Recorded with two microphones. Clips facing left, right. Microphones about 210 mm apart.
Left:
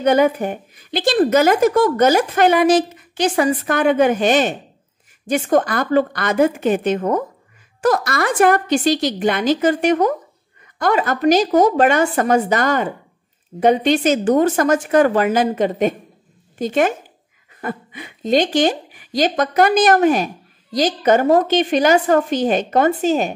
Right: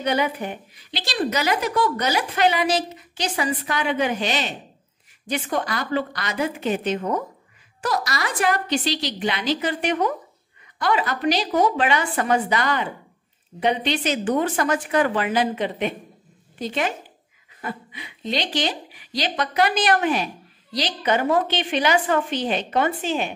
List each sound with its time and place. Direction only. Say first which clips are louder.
0.0 s a woman's voice: left 8 dB; 45° left (ahead or behind)